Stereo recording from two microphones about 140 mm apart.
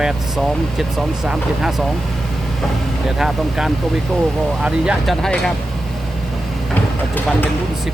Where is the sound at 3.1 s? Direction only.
Centre (ahead or behind).